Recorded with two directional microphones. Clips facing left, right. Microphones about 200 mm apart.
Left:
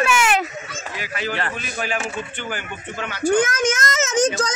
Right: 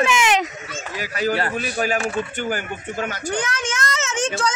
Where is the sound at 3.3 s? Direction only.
45° left (ahead or behind).